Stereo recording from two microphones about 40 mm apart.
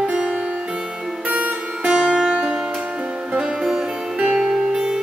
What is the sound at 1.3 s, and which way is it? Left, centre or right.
Music, right.